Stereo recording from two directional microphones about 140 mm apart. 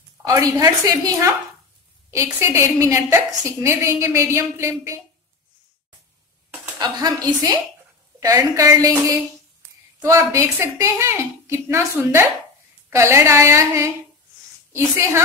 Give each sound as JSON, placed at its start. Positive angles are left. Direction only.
{"t": 0.2, "sound": "a sound", "side_deg": -25}
{"t": 0.6, "sound": "a woman's voice", "side_deg": -25}
{"t": 6.8, "sound": "a woman's voice", "side_deg": -30}